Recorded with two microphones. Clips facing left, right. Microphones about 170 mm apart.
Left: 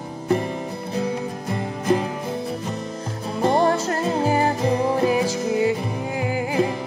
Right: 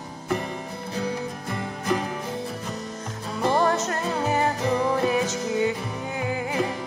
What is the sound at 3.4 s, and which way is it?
Music, 25° left (ahead or behind).